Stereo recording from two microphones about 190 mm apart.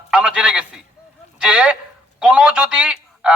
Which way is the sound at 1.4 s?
5° right (ahead or behind).